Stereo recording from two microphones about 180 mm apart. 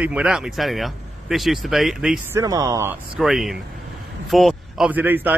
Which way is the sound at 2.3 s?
20° right (ahead or behind).